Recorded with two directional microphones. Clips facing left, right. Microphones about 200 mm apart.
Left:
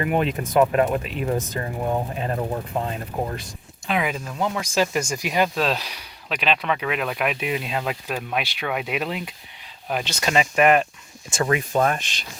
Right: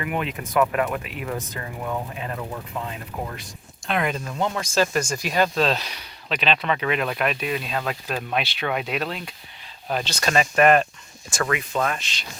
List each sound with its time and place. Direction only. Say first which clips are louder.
0.0 s speech: left 5 dB; 35° left (ahead or behind)
3.8 s speech: even; 5° left (ahead or behind)
4.7 s speech: right 1 dB; 15° left (ahead or behind)
7.3 s speech: left 1 dB; 20° left (ahead or behind)
8.0 s speech: even; 5° left (ahead or behind)
11.3 s speech: left 3 dB; 25° left (ahead or behind)
11.7 s speech: left 4 dB; 45° left (ahead or behind)